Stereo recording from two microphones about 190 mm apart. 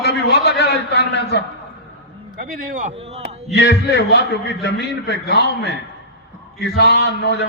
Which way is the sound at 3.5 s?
65° left (ahead or behind).